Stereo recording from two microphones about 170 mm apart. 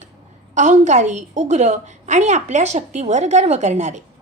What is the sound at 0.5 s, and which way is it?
Speech, 45° right (ahead or behind).